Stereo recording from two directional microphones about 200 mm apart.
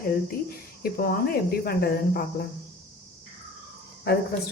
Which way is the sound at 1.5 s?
50° left (ahead or behind).